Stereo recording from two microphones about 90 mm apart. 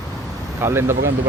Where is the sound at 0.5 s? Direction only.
30° right (ahead or behind).